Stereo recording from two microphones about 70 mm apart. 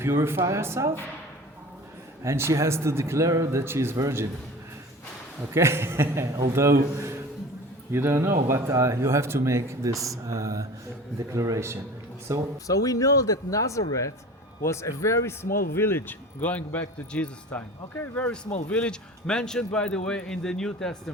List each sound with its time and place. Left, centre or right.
0.0 s a man's voice: right
2.2 s speech: right
3.6 s a man's voice: right
5.5 s a man's voice: right
12.6 s a man's voice: left; by 20.9 s centre